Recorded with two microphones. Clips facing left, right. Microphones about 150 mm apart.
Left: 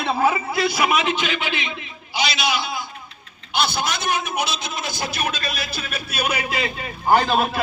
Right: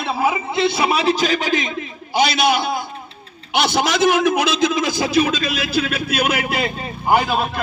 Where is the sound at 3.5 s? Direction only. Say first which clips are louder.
Right 5 dB; 85° right.